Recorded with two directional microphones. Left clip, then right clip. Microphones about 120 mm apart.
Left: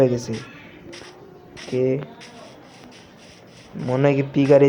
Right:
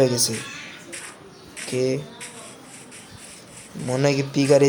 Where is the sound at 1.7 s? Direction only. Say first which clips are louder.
Left 2 dB; 10° right (ahead or behind).